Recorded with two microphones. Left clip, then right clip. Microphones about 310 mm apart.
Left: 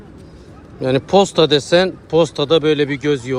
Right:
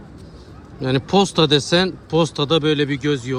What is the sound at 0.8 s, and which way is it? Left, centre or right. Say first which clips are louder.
Speech: left 4 dB; centre.